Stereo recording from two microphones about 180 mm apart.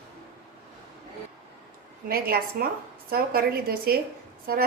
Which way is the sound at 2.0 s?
55° right (ahead or behind).